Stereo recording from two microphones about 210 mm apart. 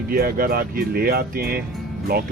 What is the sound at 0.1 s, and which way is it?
Speech, 45° right (ahead or behind).